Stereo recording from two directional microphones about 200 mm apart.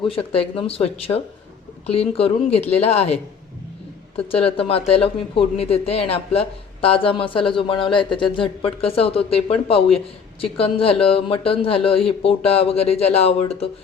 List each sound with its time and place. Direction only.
0.1 s speech: 30° left (ahead or behind)
4.3 s speech: 30° left (ahead or behind)